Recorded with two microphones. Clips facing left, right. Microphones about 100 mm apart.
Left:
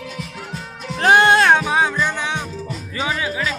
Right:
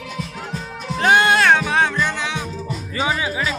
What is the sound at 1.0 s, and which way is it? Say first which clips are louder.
Music: left 2 dB; 30° left (ahead or behind).